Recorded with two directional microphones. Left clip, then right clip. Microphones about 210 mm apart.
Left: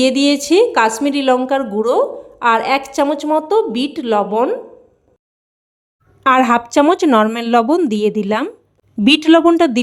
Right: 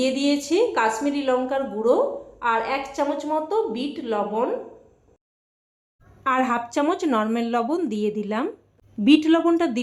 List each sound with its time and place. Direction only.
0.0 s a woman's voice: 50° left (ahead or behind)
6.2 s a woman's voice: 50° left (ahead or behind)